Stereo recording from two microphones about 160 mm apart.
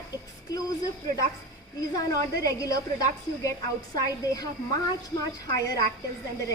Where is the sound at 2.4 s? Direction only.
20° left (ahead or behind).